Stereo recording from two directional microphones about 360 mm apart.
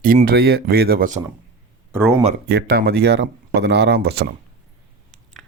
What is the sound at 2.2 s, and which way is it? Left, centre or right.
Speech, right.